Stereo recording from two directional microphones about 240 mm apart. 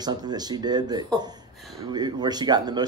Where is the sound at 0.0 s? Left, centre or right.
Centre.